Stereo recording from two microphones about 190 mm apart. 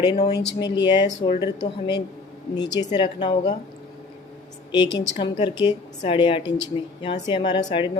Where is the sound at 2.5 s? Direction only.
20° left (ahead or behind).